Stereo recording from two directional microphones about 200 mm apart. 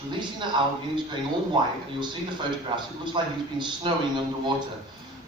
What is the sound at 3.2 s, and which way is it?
Speech, 25° right (ahead or behind).